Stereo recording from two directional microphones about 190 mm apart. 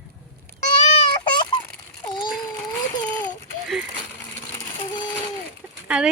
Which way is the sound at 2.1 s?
25° left (ahead or behind).